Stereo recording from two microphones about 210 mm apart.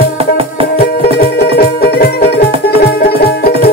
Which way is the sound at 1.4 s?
45° left (ahead or behind).